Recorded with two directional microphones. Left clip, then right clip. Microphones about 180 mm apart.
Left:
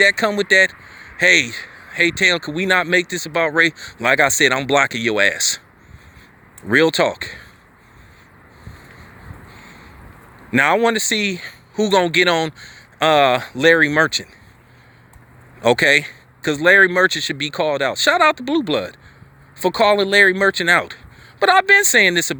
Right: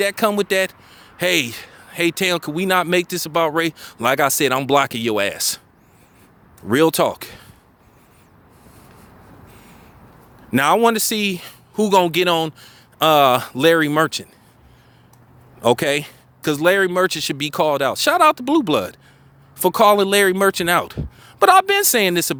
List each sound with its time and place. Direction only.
0.0 s speech: 25° right (ahead or behind)
6.7 s speech: 30° right (ahead or behind)
10.5 s speech: 30° right (ahead or behind)
15.6 s speech: 25° right (ahead or behind)